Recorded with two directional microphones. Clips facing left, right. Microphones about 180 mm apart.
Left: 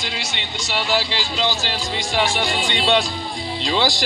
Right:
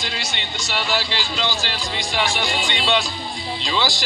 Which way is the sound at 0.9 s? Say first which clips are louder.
Left 2 dB; 30° left (ahead or behind).